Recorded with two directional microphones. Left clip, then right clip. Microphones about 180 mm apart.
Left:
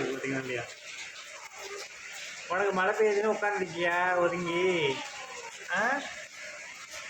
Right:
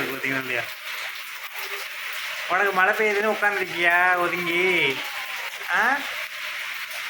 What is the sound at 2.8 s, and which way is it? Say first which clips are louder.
Speech: right 4 dB; 5° right (ahead or behind).